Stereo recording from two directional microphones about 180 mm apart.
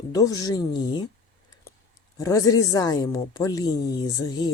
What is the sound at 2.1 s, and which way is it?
Speech, 20° left (ahead or behind).